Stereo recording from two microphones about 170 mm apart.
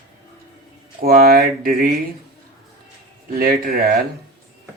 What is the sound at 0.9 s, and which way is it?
Speech, 60° right (ahead or behind).